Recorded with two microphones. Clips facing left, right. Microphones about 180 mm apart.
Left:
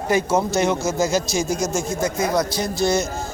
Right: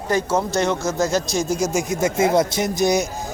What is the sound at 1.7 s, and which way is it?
Speech, 20° right (ahead or behind).